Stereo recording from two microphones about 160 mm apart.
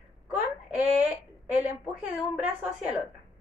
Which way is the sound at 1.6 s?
10° right (ahead or behind).